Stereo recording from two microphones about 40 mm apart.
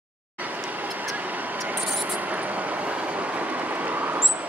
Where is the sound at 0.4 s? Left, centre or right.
Right.